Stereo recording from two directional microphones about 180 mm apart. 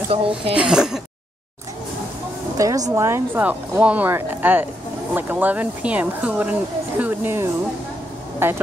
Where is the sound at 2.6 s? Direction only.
20° right (ahead or behind).